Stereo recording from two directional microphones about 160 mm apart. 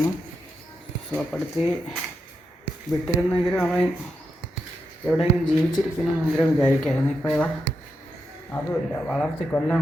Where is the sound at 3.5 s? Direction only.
5° left (ahead or behind).